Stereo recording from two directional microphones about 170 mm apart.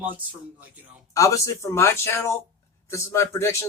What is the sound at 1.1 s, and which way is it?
Speech, 20° left (ahead or behind).